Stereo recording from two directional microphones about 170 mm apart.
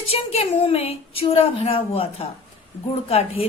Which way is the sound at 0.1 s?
35° left (ahead or behind).